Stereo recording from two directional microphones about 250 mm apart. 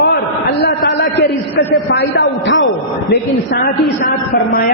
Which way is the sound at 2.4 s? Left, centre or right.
Left.